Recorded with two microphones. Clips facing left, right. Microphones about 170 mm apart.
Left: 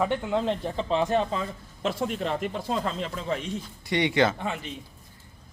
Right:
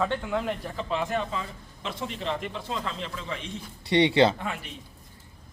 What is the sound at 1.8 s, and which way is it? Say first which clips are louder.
Speech: left 5 dB; 50° left (ahead or behind).